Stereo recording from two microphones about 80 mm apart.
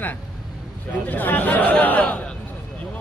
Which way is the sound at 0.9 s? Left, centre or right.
Left.